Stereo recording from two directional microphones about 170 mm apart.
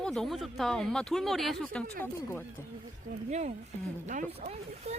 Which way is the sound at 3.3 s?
45° right (ahead or behind).